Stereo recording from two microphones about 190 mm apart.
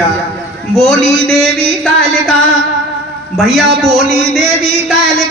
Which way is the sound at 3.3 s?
Centre (ahead or behind).